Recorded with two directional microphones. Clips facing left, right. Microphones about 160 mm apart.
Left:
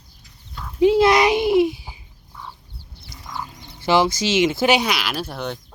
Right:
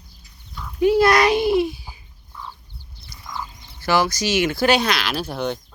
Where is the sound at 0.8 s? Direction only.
20° left (ahead or behind).